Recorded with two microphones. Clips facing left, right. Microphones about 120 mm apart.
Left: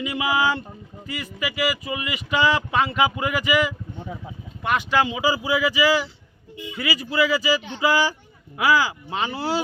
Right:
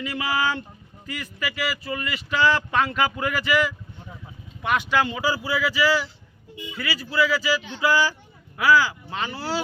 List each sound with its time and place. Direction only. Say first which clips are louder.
0.0 s speech: left 3 dB; 15° left (ahead or behind)
8.5 s speech: right 1 dB; 15° left (ahead or behind)